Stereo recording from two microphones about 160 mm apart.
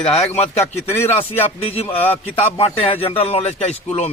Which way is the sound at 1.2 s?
35° left (ahead or behind).